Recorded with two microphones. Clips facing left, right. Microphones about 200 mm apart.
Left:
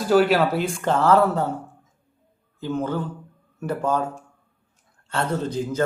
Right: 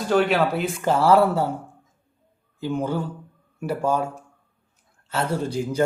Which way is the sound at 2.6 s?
10° right (ahead or behind).